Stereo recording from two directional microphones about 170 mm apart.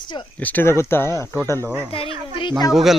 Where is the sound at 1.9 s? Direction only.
35° left (ahead or behind).